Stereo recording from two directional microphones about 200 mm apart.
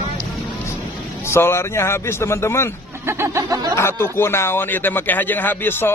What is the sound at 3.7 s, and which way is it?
Speech, 10° left (ahead or behind).